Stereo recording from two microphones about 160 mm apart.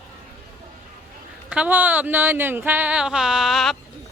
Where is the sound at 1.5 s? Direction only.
10° right (ahead or behind).